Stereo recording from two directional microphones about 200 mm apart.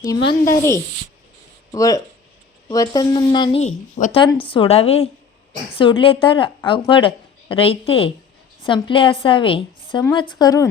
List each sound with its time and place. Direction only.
0.0 s speech: 20° left (ahead or behind)
1.7 s a woman's voice: 15° left (ahead or behind)
3.9 s speech: 40° left (ahead or behind)
4.2 s a woman's voice: 25° left (ahead or behind)